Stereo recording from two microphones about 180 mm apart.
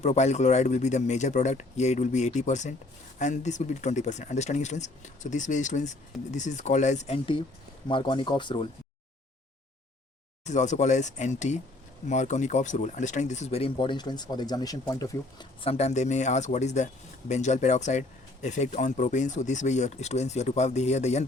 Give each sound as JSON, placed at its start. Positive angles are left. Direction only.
{"t": 0.0, "sound": "speech", "side_deg": 40}
{"t": 10.4, "sound": "speech", "side_deg": 40}
{"t": 15.8, "sound": "speech", "side_deg": 40}